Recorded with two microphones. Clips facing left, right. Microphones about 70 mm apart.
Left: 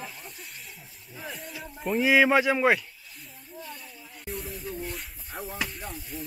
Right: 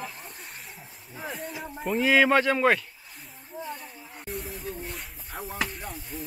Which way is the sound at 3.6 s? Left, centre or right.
Right.